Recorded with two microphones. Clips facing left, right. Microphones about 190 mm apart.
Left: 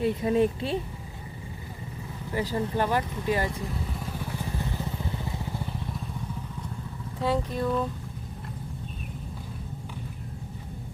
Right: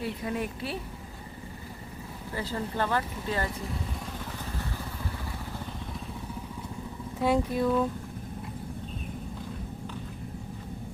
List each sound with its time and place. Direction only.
0.0 s speech: 25° left (ahead or behind)
2.3 s speech: 15° left (ahead or behind)
4.0 s vehicle: 10° left (ahead or behind)
7.2 s speech: 15° right (ahead or behind)
7.6 s speech: 5° right (ahead or behind)